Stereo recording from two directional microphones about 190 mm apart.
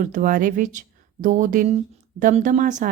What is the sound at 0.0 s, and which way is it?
Speech, 45° right (ahead or behind).